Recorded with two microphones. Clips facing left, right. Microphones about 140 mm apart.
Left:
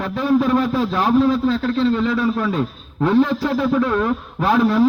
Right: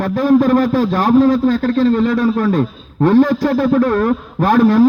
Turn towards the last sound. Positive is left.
turn(degrees=-45)  # may be behind; listen again after turning